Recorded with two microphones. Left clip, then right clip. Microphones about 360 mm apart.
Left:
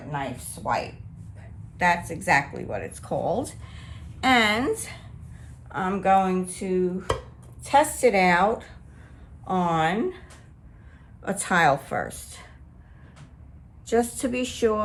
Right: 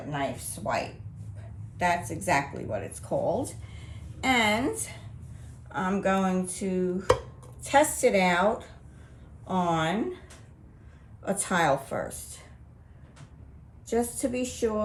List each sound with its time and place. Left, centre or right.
1.4 s speech: centre
13.8 s speech: left